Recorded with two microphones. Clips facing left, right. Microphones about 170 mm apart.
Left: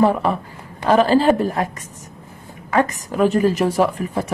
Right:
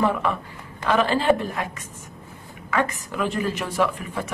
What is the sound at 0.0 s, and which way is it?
Speech, 35° left (ahead or behind).